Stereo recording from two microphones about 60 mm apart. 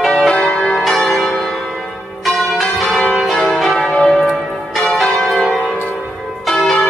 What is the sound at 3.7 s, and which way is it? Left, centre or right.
Church bell, centre.